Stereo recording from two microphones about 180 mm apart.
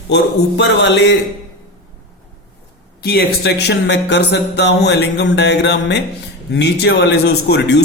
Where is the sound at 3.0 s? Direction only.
60° left (ahead or behind).